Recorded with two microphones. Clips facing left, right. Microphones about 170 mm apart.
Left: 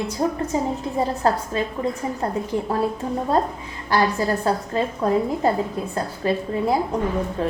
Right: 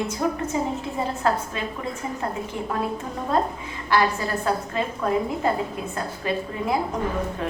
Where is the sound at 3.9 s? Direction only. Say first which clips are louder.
Left 2 dB; 40° left (ahead or behind).